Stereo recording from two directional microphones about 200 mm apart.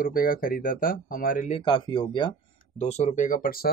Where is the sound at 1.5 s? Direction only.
25° left (ahead or behind); by 3.7 s 45° left (ahead or behind).